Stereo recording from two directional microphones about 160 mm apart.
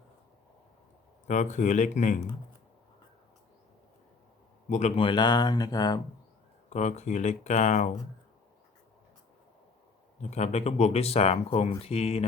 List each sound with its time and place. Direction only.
1.3 s speech: 50° left (ahead or behind)
4.7 s speech: 45° left (ahead or behind)
5.0 s speech: 30° left (ahead or behind)
6.7 s speech: 45° left (ahead or behind)
10.2 s speech: 45° left (ahead or behind)